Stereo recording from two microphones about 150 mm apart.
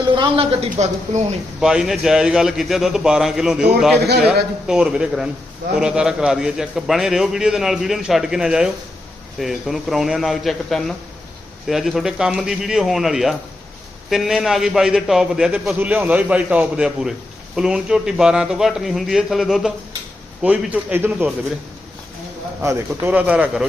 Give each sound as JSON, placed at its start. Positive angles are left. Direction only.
{"t": 0.2, "sound": "speech", "side_deg": -40}
{"t": 1.6, "sound": "a man's voice", "side_deg": -5}
{"t": 20.4, "sound": "a man's voice", "side_deg": -10}
{"t": 22.6, "sound": "a man's voice", "side_deg": -10}